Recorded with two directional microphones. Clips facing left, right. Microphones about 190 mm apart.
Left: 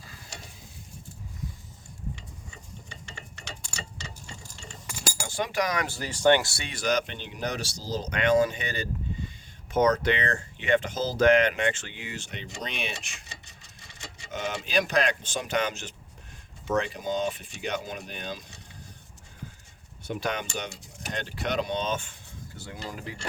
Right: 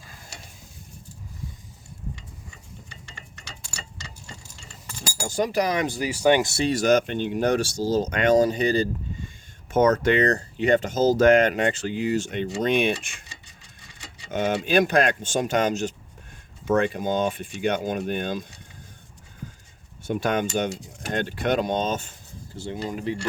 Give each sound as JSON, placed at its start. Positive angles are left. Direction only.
{"t": 5.2, "sound": "speech", "side_deg": -40}
{"t": 5.8, "sound": "speech", "side_deg": -15}
{"t": 6.7, "sound": "speech", "side_deg": -45}
{"t": 9.7, "sound": "speech", "side_deg": -50}
{"t": 14.3, "sound": "speech", "side_deg": -55}
{"t": 20.1, "sound": "speech", "side_deg": -50}
{"t": 22.5, "sound": "speech", "side_deg": -25}